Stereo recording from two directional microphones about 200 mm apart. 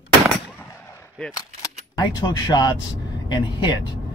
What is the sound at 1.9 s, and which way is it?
Speech, 20° left (ahead or behind).